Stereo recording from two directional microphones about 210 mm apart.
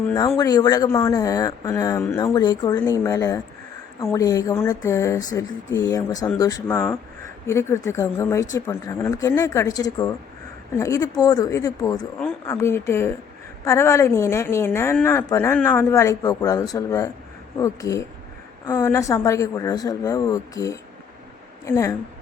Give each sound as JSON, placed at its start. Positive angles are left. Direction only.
{"t": 0.1, "sound": "a woman's voice", "side_deg": 15}